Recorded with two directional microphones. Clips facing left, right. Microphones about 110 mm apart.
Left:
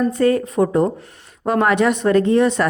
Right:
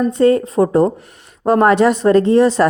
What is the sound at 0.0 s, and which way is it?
A woman's voice, 25° right (ahead or behind).